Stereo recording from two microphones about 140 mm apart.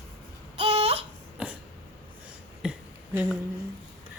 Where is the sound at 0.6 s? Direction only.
45° right (ahead or behind).